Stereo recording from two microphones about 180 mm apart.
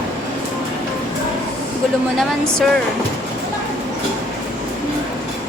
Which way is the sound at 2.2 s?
5° left (ahead or behind).